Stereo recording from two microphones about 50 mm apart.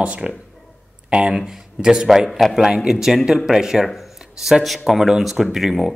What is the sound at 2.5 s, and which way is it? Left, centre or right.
Speech, centre.